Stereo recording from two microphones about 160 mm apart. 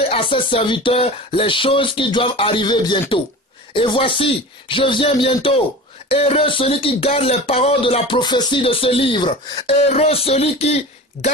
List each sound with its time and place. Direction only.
0.1 s speech: 35° left (ahead or behind)
9.8 s speech: 40° left (ahead or behind)